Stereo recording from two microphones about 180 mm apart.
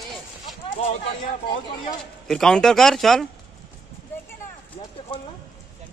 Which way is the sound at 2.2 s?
5° left (ahead or behind).